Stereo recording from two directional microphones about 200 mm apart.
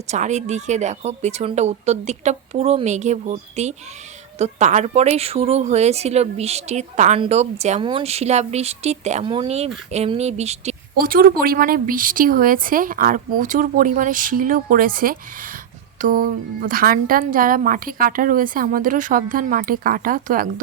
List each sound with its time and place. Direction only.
0.1 s speech: 35° right (ahead or behind)
10.9 s a woman's voice: 45° right (ahead or behind)